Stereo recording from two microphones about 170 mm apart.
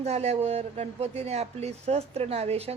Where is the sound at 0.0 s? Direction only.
40° right (ahead or behind).